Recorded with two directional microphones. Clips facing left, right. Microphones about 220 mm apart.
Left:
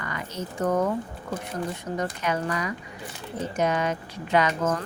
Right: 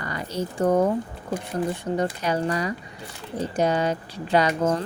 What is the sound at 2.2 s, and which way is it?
Speech, 35° right (ahead or behind).